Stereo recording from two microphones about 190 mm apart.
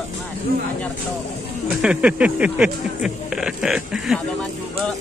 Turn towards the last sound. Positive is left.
turn(degrees=-5)  # may be behind; listen again after turning